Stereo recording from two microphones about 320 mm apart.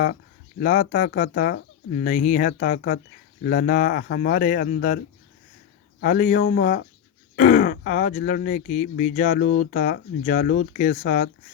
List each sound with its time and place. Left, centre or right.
0.6 s speech: left
6.0 s speech: left